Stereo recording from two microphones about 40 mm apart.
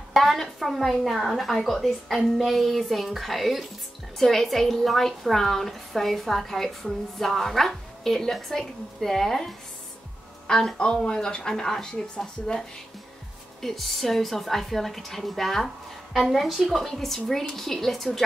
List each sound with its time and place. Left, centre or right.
0.1 s a woman's voice: centre
13.6 s a woman's voice: centre
16.8 s speech: centre